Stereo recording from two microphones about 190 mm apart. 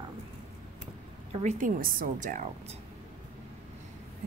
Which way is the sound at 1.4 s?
40° right (ahead or behind).